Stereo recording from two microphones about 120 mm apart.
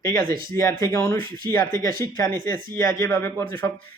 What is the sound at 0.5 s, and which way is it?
Speech, 25° left (ahead or behind).